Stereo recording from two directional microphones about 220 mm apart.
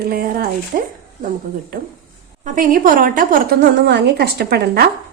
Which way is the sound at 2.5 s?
40° right (ahead or behind).